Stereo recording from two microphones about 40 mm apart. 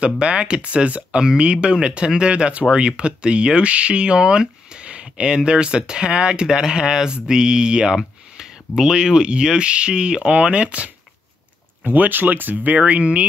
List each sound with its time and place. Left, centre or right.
0.0 s speech: right
11.8 s speech: right
12.7 s speech: right